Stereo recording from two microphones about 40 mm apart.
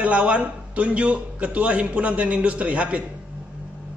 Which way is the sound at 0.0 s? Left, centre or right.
Right.